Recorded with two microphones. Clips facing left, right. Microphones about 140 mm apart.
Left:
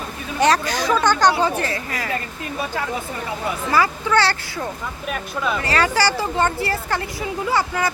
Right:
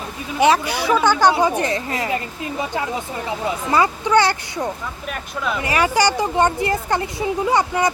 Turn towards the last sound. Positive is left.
turn(degrees=-20)  # may be behind; listen again after turning